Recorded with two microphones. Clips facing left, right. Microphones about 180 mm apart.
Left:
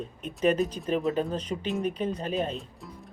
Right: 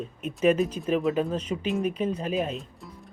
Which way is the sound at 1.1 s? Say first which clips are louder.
Right 2 dB; 30° left (ahead or behind).